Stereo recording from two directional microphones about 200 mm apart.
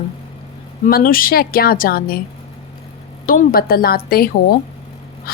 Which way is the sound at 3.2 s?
45° left (ahead or behind).